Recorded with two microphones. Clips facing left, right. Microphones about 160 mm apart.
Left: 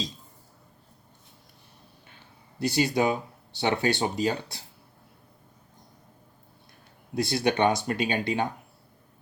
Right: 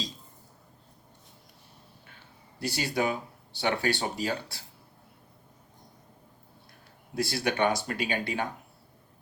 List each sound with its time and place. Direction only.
2.6 s speech: 20° left (ahead or behind)
7.2 s speech: 20° left (ahead or behind)